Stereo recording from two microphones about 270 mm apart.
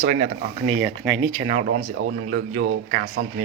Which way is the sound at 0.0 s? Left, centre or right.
Right.